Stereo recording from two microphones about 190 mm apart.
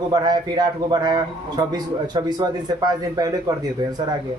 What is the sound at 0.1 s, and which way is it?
A man's voice, 20° right (ahead or behind).